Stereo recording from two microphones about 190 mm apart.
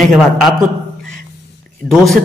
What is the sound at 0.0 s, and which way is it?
Speech, centre (ahead or behind).